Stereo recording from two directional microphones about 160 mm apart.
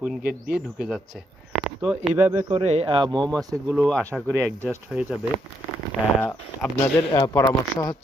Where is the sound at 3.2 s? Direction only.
5° left (ahead or behind).